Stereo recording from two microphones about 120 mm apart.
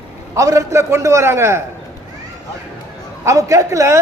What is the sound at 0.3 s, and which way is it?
A man's voice, 25° right (ahead or behind).